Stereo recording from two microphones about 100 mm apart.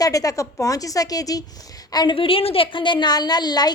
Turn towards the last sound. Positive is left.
turn(degrees=45)  # may be behind; listen again after turning